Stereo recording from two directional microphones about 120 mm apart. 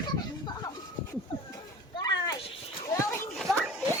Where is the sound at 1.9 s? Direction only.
35° left (ahead or behind).